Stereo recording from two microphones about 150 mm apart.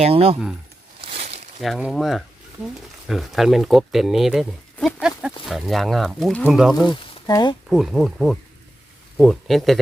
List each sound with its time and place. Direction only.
0.0 s speech: 40° right (ahead or behind)
1.1 s crumpling: 55° right (ahead or behind)
1.6 s speech: centre (ahead or behind)
6.8 s speech: 30° left (ahead or behind)
7.7 s speech: centre (ahead or behind)